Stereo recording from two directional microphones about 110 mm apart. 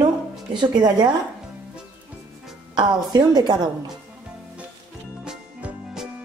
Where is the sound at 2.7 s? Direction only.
40° right (ahead or behind).